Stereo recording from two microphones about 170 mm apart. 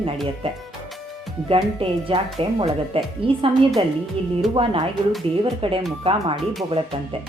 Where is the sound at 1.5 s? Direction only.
35° right (ahead or behind).